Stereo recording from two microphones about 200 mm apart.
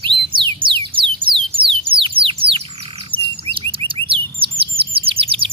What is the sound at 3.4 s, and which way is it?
Chirp, 25° right (ahead or behind).